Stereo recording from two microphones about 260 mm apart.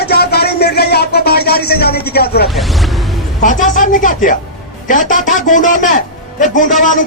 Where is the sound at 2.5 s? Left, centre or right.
Centre.